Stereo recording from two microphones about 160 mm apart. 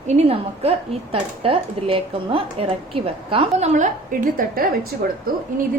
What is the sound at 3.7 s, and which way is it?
A woman's voice, 55° right (ahead or behind).